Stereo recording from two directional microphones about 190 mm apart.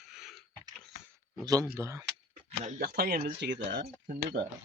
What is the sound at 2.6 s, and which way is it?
Speech, 45° right (ahead or behind).